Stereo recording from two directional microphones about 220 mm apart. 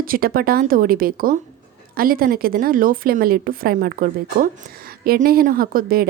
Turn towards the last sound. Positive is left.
turn(degrees=-40)  # may be behind; listen again after turning